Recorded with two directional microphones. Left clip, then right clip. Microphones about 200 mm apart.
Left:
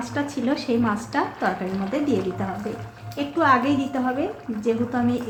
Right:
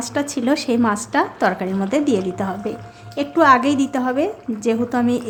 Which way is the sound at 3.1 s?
45° right (ahead or behind).